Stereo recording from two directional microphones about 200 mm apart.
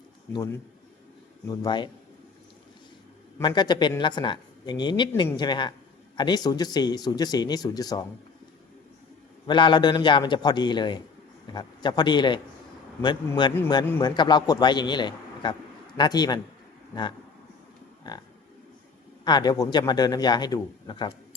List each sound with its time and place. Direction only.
1.5 s speech: 20° left (ahead or behind)
3.3 s speech: 20° left (ahead or behind)
9.5 s speech: 25° left (ahead or behind)
18.0 s cattle: 20° left (ahead or behind)
19.2 s speech: 20° left (ahead or behind)